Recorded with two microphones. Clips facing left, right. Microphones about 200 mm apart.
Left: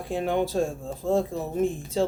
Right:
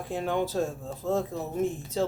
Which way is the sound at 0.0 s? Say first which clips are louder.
Left 3 dB; 15° left (ahead or behind).